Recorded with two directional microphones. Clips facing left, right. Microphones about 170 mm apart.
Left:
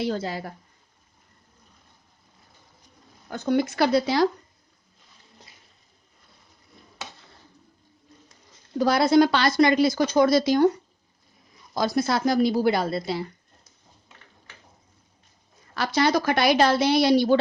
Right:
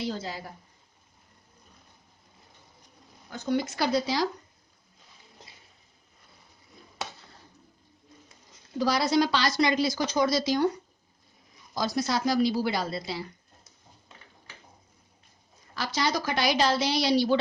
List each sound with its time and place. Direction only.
0.0 s a woman's voice: 60° left (ahead or behind)
3.2 s a woman's voice: 55° left (ahead or behind)
8.8 s a woman's voice: 55° left (ahead or behind)
11.7 s a woman's voice: 55° left (ahead or behind)
15.7 s a woman's voice: 60° left (ahead or behind)